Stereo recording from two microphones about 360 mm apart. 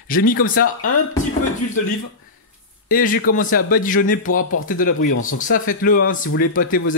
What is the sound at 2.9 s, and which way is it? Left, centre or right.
Speech, left.